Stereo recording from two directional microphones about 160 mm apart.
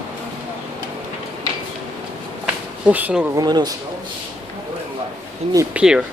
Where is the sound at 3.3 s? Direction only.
25° right (ahead or behind).